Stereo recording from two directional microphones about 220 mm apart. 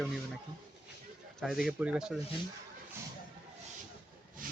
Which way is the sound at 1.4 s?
Centre (ahead or behind).